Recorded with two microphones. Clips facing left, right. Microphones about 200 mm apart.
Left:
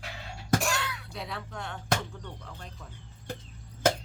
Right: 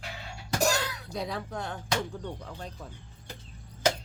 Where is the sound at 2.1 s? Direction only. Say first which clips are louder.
Right 6 dB; 35° right (ahead or behind).